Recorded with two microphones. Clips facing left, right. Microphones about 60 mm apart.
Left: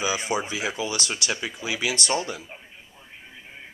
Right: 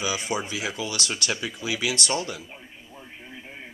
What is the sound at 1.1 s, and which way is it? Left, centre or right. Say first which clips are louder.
Speech: even; centre.